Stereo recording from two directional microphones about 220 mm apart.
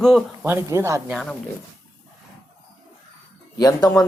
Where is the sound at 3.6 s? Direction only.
15° left (ahead or behind).